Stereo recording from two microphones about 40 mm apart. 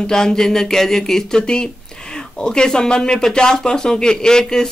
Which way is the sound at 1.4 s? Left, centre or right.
Left.